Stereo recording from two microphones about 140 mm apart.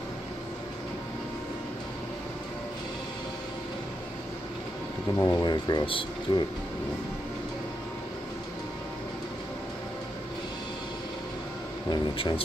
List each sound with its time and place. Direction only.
5.2 s speech: 30° left (ahead or behind)
11.9 s speech: 35° left (ahead or behind)